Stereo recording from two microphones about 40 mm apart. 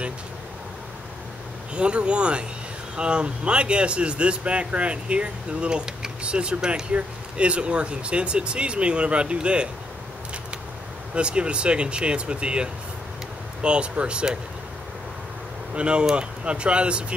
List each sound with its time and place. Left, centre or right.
1.7 s speech: right
11.1 s speech: right
15.7 s speech: right